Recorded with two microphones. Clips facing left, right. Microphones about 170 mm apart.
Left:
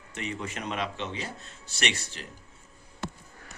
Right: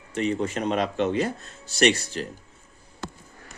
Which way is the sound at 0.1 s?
35° right (ahead or behind).